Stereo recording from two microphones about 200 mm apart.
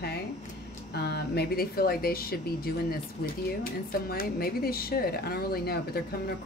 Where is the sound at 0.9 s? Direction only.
55° left (ahead or behind).